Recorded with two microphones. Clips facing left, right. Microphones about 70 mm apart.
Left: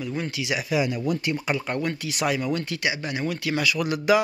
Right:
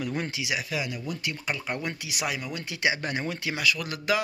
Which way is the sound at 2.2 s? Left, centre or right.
Centre.